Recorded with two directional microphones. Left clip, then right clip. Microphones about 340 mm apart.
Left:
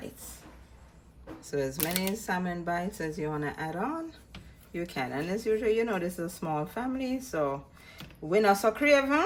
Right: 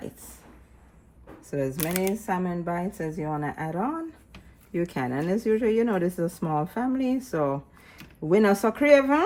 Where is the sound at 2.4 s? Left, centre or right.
Centre.